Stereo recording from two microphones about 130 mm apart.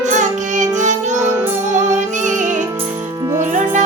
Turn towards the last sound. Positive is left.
turn(degrees=-70)  # may be behind; listen again after turning